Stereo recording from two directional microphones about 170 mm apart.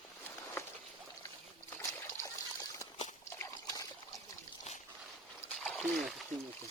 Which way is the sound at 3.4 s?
20° left (ahead or behind).